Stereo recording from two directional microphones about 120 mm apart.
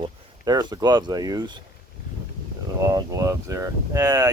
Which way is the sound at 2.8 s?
30° right (ahead or behind).